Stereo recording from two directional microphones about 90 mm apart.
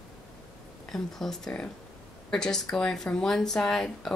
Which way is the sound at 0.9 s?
5° left (ahead or behind).